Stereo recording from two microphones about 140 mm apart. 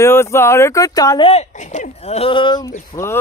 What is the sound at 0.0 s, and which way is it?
Speech, 20° left (ahead or behind).